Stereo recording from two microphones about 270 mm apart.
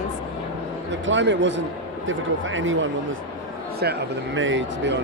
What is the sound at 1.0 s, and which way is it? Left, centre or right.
A man's voice, right.